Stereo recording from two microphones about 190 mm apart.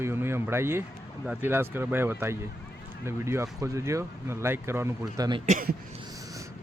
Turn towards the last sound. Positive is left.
turn(degrees=-45)  # may be behind; listen again after turning